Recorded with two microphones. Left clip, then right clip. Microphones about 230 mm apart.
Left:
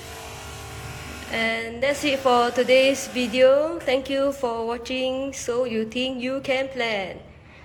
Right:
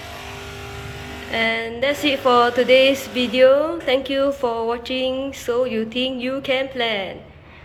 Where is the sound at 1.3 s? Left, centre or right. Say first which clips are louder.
Right 4 dB; centre.